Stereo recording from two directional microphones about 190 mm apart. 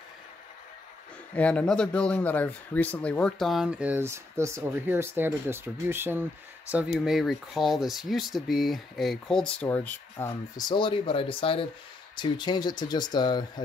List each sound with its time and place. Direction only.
1.3 s speech: 5° left (ahead or behind); by 13.5 s 20° left (ahead or behind)